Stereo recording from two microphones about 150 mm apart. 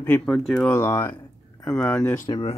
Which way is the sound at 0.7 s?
15° left (ahead or behind).